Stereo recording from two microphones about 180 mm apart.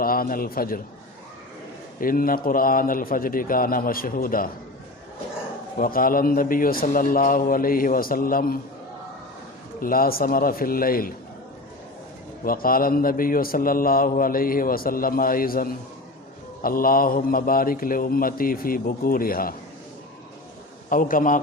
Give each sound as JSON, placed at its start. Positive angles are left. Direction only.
{"t": 0.0, "sound": "a man's voice", "side_deg": 55}
{"t": 2.0, "sound": "speech", "side_deg": 50}
{"t": 5.7, "sound": "speech", "side_deg": 55}
{"t": 9.8, "sound": "speech", "side_deg": 55}
{"t": 12.5, "sound": "speech", "side_deg": 55}
{"t": 20.9, "sound": "speech", "side_deg": 50}